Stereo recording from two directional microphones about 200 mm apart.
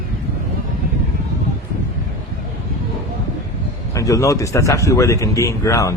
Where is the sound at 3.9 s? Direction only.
15° left (ahead or behind).